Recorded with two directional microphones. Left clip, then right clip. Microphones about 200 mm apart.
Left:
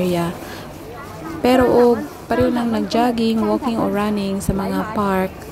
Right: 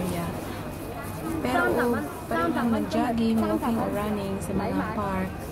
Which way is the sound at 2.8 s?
40° left (ahead or behind).